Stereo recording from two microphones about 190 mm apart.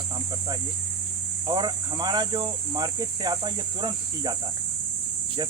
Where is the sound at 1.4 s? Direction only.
25° right (ahead or behind).